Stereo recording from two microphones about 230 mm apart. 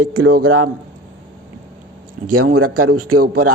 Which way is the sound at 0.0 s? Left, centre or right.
Right.